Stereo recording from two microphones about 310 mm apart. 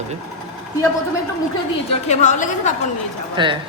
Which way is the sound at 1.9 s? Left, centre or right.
Left.